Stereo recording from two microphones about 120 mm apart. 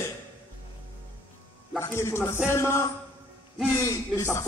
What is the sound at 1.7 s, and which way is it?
A man's voice, 20° left (ahead or behind).